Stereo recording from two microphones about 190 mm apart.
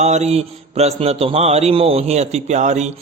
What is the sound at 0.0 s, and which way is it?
Mantra, 35° right (ahead or behind).